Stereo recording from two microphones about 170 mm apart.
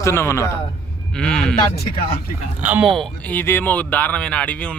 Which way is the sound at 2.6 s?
5° right (ahead or behind).